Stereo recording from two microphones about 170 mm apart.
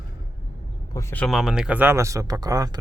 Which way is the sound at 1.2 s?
Centre (ahead or behind).